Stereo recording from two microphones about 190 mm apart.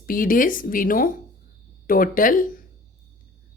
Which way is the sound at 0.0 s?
50° left (ahead or behind).